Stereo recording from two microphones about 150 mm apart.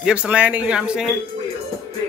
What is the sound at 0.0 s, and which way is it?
Speech, 10° right (ahead or behind).